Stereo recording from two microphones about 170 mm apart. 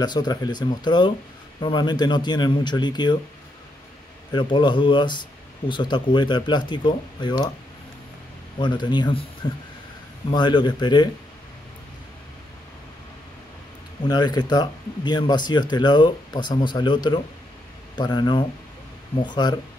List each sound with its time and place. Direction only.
0.0 s speech: 25° left (ahead or behind)
4.3 s speech: 25° left (ahead or behind)
8.5 s speech: 25° left (ahead or behind)
14.0 s speech: 25° left (ahead or behind)